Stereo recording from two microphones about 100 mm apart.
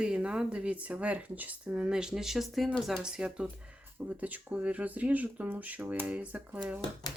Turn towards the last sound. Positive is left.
turn(degrees=-15)  # may be behind; listen again after turning